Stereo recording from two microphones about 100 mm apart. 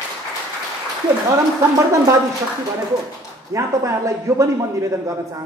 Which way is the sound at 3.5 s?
30° right (ahead or behind).